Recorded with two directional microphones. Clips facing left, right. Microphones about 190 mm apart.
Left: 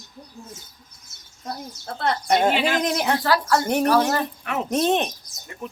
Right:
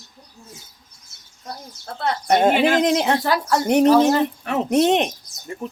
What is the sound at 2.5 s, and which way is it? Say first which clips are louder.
Speech: right 5 dB; 50° right (ahead or behind).